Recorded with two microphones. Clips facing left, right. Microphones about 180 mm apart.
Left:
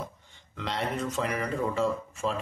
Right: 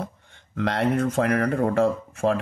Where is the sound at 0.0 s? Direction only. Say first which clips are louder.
Right 5 dB; 60° right (ahead or behind).